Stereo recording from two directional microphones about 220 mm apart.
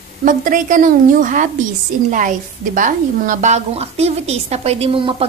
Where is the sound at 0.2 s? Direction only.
35° right (ahead or behind).